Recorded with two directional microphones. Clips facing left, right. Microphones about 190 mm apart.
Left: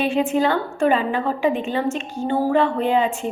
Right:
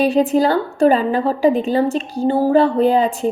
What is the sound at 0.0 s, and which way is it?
A woman's voice, 40° right (ahead or behind).